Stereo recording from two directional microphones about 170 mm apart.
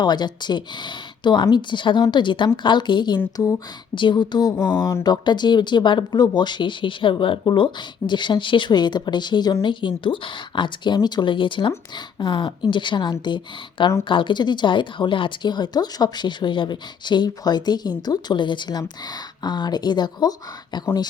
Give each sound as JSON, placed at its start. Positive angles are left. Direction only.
{"t": 0.0, "sound": "speech", "side_deg": 25}